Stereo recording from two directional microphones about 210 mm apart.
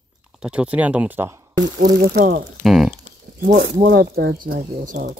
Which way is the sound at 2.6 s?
Centre (ahead or behind).